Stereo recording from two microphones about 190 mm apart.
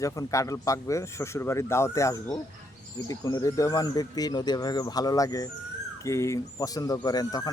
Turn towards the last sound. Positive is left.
turn(degrees=20)  # may be behind; listen again after turning